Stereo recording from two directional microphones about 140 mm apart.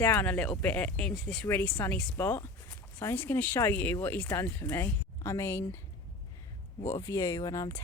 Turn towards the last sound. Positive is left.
turn(degrees=25)  # may be behind; listen again after turning